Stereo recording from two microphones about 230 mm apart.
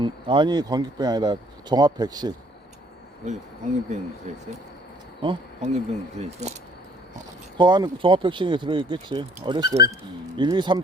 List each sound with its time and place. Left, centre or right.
0.0 s speech: right
4.3 s speech: right
7.6 s speech: centre